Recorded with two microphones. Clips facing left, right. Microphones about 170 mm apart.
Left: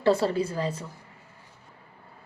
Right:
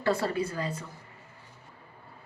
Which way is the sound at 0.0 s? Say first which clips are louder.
Left 5 dB; 25° left (ahead or behind).